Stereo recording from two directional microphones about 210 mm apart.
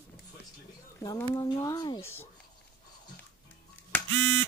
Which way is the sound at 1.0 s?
20° left (ahead or behind).